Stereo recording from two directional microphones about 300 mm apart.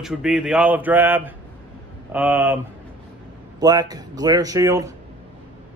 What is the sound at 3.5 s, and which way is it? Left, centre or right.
Speech, centre.